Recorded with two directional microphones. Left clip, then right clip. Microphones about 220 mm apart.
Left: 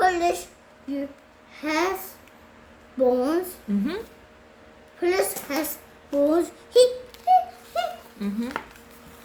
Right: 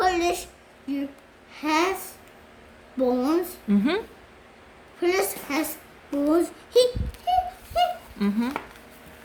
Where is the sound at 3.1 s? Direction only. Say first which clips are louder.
Even; 30° right (ahead or behind).